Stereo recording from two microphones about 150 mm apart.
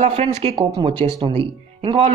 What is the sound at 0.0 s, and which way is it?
A woman's voice, 40° right (ahead or behind).